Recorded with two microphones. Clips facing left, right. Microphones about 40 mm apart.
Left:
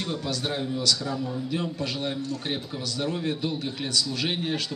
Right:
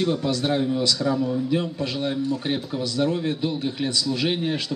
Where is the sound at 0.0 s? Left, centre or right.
Centre.